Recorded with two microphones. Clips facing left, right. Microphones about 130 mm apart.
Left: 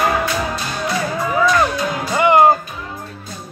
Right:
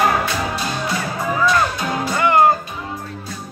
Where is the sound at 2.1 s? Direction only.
20° left (ahead or behind).